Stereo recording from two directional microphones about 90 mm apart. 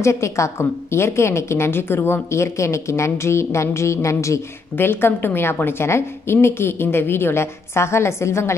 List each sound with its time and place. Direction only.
0.0 s a woman's voice: 35° left (ahead or behind)